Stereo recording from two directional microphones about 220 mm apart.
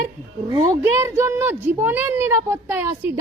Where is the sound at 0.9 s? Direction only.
10° right (ahead or behind).